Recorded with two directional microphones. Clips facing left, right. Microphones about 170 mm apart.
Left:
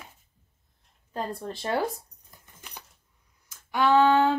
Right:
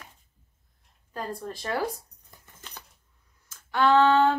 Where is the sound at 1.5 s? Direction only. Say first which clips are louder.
Left 2 dB; 25° left (ahead or behind).